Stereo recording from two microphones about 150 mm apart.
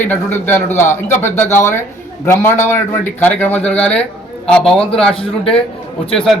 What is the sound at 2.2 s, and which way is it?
A man's voice, 15° left (ahead or behind).